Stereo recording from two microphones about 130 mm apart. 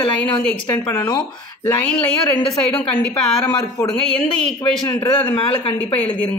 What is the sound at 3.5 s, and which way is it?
Speech, 30° left (ahead or behind).